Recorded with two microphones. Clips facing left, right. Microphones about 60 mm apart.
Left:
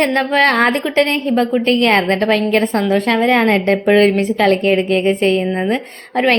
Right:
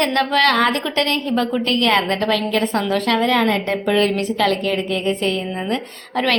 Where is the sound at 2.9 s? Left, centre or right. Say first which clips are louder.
Left 4 dB; left.